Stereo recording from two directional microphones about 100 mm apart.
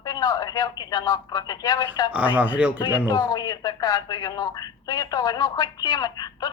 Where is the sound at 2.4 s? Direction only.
15° right (ahead or behind).